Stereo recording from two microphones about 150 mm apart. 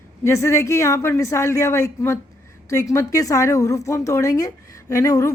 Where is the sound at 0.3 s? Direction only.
20° left (ahead or behind).